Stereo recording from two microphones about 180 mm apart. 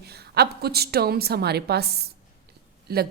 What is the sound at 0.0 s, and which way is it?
A woman's voice, 65° right (ahead or behind).